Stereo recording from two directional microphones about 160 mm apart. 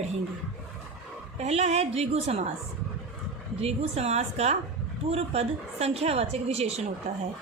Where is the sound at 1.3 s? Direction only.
45° right (ahead or behind).